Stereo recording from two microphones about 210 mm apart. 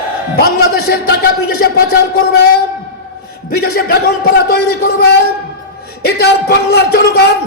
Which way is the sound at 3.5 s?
45° left (ahead or behind).